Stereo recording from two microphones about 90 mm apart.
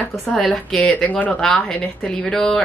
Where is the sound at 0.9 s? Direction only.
15° left (ahead or behind).